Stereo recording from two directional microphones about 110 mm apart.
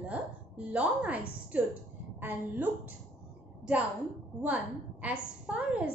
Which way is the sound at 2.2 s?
15° right (ahead or behind).